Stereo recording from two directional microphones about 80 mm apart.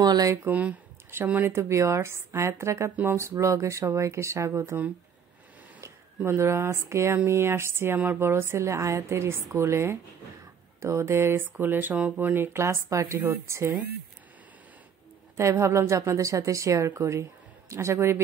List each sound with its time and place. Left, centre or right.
0.0 s a sound: right
0.5 s speech: centre
1.6 s a woman's voice: right
5.8 s a woman's voice: right
12.6 s a woman's voice: right
15.3 s a woman's voice: right